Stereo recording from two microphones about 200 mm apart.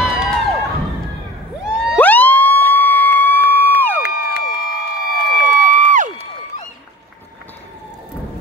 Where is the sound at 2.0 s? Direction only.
10° left (ahead or behind).